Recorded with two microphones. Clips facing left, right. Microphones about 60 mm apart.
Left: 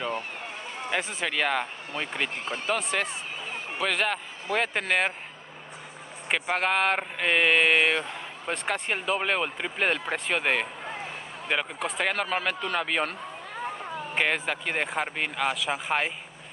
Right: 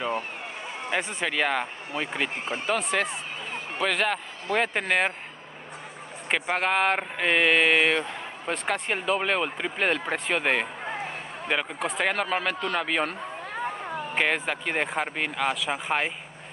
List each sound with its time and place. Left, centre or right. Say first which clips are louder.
0.8 s speech: right 1 dB; centre
2.3 s speech: right 2 dB; right
2.9 s speech: right 2 dB; centre
6.2 s speech: right 1 dB; centre
14.1 s speech: right 1 dB; centre